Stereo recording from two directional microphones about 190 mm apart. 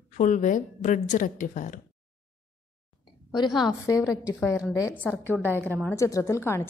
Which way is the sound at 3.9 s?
15° left (ahead or behind).